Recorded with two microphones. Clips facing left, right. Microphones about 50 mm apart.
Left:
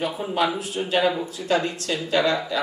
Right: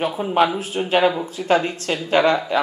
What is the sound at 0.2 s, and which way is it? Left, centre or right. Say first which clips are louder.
Speech: right 7 dB; right.